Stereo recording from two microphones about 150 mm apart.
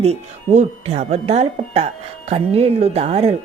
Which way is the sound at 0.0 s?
45° right (ahead or behind).